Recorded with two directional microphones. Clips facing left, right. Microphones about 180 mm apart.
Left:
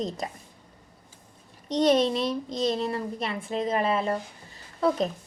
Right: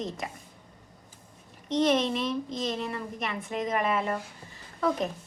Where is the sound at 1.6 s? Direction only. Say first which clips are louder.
Left 3 dB; 35° left (ahead or behind).